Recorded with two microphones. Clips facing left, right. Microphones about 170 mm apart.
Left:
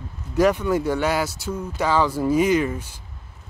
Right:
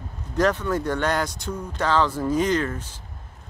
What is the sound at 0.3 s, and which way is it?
Speech, 10° left (ahead or behind).